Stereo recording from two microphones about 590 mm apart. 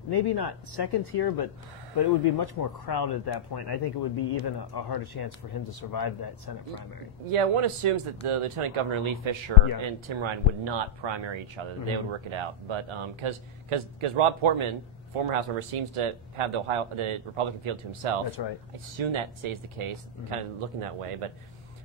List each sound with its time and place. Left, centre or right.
0.1 s speech: left
7.2 s speech: right
18.4 s speech: left
18.9 s speech: right